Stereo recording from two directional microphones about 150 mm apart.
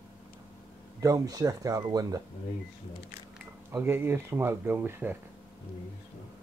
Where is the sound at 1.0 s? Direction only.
20° right (ahead or behind).